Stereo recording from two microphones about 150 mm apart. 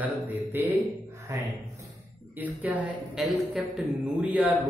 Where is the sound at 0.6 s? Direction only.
10° right (ahead or behind).